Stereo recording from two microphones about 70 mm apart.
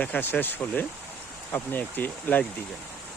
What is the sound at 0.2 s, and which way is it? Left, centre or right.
Speech, left.